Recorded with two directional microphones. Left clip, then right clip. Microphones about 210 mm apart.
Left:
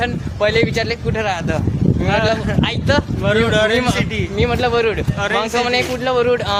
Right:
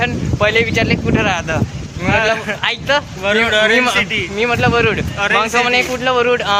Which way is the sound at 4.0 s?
10° left (ahead or behind).